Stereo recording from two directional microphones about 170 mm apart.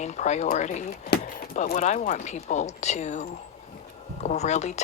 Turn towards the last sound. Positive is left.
turn(degrees=40)  # may be behind; listen again after turning